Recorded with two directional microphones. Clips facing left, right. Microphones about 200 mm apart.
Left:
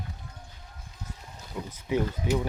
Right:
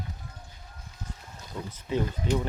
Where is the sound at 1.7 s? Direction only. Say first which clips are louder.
Left 2 dB; 10° left (ahead or behind).